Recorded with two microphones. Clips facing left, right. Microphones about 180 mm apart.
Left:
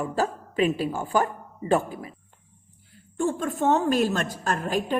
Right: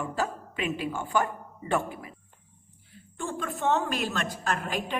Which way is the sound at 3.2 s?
40° left (ahead or behind).